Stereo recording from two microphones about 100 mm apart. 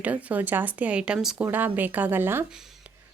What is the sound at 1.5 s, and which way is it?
Speech, 20° right (ahead or behind).